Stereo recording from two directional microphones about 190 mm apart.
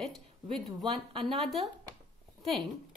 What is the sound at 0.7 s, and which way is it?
Speech, centre (ahead or behind).